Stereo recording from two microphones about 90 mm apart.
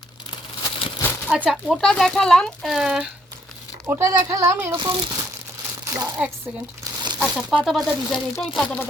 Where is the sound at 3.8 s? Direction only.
30° right (ahead or behind).